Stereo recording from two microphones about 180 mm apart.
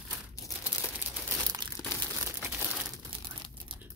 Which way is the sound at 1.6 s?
25° right (ahead or behind).